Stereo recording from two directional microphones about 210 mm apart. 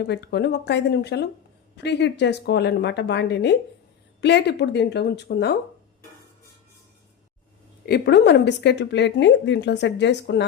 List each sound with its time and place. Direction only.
0.0 s a woman's voice: 55° left (ahead or behind)
7.9 s speech: 50° left (ahead or behind)